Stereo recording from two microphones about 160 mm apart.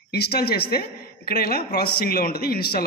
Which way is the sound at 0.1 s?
85° left.